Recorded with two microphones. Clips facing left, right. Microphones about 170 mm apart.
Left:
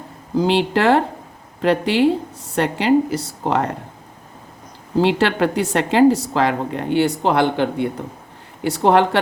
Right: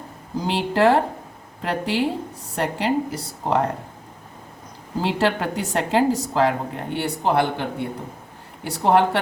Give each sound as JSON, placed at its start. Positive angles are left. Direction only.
{"t": 0.3, "sound": "a woman's voice", "side_deg": 90}
{"t": 4.9, "sound": "a woman's voice", "side_deg": 85}